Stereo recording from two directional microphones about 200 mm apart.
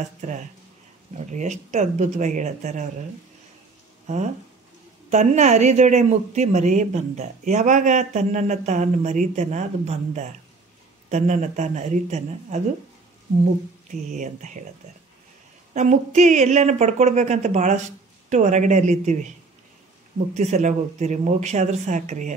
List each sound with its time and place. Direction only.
1.1 s a woman's voice: 35° right (ahead or behind)
5.1 s a woman's voice: 35° right (ahead or behind)
14.1 s a woman's voice: 40° right (ahead or behind)
15.7 s a woman's voice: 35° right (ahead or behind)
20.3 s a woman's voice: 35° right (ahead or behind)